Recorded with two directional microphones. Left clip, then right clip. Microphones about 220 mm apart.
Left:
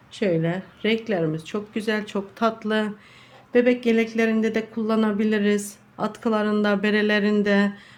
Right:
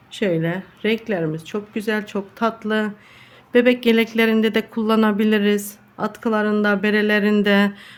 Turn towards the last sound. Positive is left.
turn(degrees=-20)  # may be behind; listen again after turning